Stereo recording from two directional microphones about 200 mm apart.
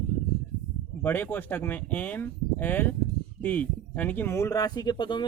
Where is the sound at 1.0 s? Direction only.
10° left (ahead or behind).